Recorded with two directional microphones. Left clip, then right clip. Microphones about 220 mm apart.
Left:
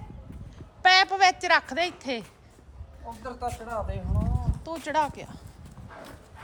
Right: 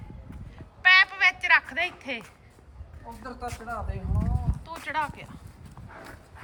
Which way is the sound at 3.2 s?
Centre (ahead or behind).